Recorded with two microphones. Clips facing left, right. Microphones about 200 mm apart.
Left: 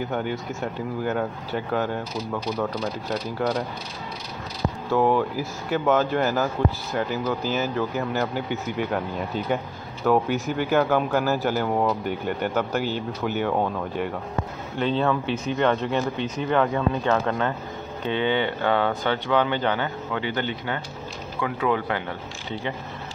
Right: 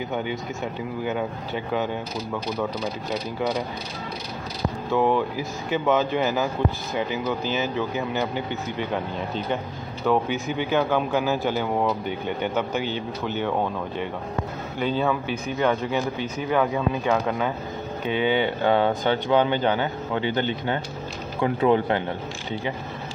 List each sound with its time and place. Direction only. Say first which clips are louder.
0.1 s speech: left 1 dB; 10° right (ahead or behind)
3.1 s speech: left 1 dB; 10° right (ahead or behind)
4.9 s speech: left 1 dB; 5° left (ahead or behind)
14.8 s speech: left 1 dB; 5° right (ahead or behind); by 22.0 s 25° right (ahead or behind)